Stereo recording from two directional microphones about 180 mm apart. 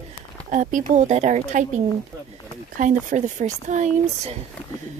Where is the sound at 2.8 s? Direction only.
45° right (ahead or behind).